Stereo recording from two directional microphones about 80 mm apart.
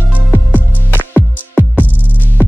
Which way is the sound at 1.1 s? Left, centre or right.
Left.